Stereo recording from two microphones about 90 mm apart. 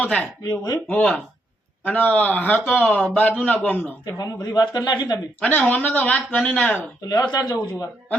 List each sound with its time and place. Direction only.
0.0 s speech: 15° left (ahead or behind)
0.5 s speech: 45° left (ahead or behind)
0.9 s a man's voice: 15° left (ahead or behind)
4.0 s speech: 45° left (ahead or behind)
5.4 s speech: 15° left (ahead or behind)
7.1 s speech: 45° left (ahead or behind)